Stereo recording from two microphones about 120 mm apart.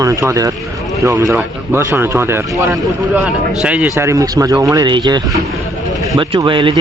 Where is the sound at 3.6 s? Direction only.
10° right (ahead or behind).